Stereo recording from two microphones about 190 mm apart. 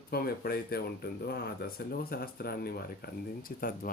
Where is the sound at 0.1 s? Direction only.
55° left (ahead or behind).